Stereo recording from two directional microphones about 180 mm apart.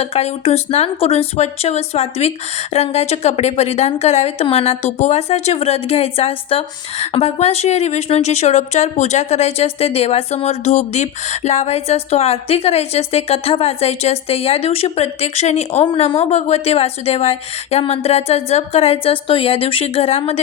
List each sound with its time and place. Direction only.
0.0 s a woman's voice: 35° left (ahead or behind)